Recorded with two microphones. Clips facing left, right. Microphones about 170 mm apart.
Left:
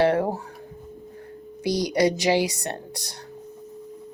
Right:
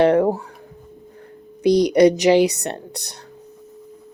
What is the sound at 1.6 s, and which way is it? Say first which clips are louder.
Speech: right 8 dB; 20° right (ahead or behind).